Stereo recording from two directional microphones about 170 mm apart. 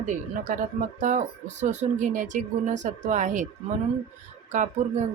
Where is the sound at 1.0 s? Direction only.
45° right (ahead or behind).